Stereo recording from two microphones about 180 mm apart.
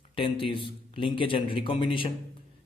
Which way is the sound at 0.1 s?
30° left (ahead or behind).